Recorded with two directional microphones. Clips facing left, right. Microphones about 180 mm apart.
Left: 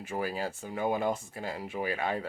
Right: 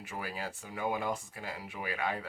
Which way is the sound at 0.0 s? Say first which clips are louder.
Left 7 dB; 30° left (ahead or behind).